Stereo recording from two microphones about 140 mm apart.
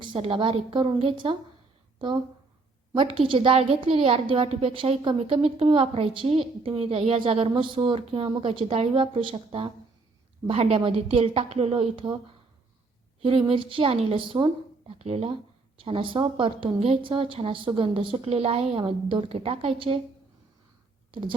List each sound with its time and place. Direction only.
0.0 s a woman's voice: 35° right (ahead or behind)
13.4 s a woman's voice: 40° right (ahead or behind)
14.9 s a woman's voice: 45° right (ahead or behind)
21.1 s speech: 35° right (ahead or behind)